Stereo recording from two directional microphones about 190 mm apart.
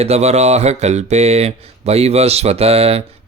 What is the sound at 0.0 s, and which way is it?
Speech, 35° right (ahead or behind).